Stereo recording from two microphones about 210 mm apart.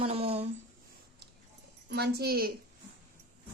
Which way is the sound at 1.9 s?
50° right (ahead or behind).